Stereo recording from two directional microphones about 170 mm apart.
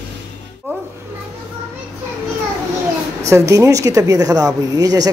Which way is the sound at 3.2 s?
15° right (ahead or behind).